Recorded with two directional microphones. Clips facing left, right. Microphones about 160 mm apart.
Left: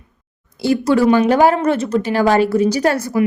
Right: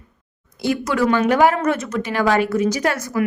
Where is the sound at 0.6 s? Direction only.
30° left (ahead or behind).